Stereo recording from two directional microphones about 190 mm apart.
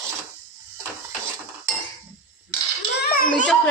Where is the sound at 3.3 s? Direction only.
5° left (ahead or behind).